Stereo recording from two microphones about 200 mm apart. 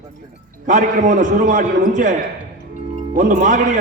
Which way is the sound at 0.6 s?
40° right (ahead or behind).